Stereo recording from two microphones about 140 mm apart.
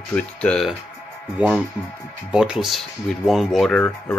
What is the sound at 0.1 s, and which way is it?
Speech, 5° left (ahead or behind).